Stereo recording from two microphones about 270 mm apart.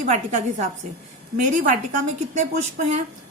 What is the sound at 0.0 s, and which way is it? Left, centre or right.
A woman's voice, right.